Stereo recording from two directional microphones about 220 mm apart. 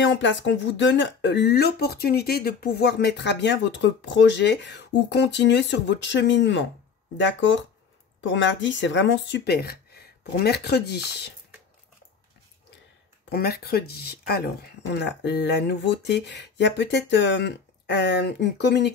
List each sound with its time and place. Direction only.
0.0 s speech: 55° left (ahead or behind)
13.3 s speech: 45° left (ahead or behind)